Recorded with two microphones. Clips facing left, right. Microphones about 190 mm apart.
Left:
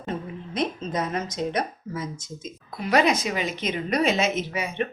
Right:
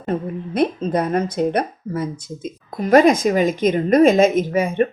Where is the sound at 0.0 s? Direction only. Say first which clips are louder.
Right 8 dB; 55° right (ahead or behind).